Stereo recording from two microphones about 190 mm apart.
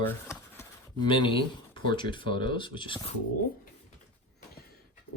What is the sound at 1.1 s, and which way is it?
Speech, 25° left (ahead or behind).